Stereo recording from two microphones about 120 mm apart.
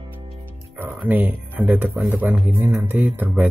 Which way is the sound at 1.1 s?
15° right (ahead or behind).